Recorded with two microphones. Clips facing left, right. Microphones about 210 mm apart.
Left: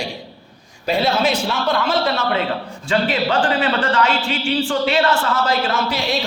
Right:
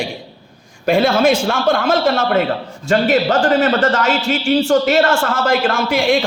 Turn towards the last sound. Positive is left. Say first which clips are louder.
# right 6 dB
turn(degrees=-50)  # may be behind; listen again after turning